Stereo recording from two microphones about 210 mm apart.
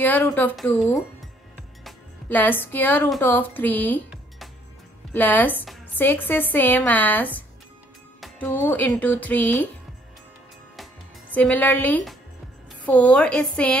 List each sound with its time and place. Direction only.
0.0 s speech: 10° left (ahead or behind)
5.1 s speech: 10° left (ahead or behind)
10.8 s music: 5° left (ahead or behind)
12.8 s a woman's voice: 5° left (ahead or behind)